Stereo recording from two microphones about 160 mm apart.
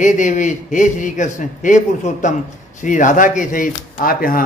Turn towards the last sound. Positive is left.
turn(degrees=60)  # may be behind; listen again after turning